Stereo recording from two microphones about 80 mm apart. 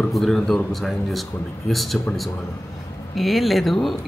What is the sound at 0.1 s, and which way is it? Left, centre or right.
A man's voice, centre.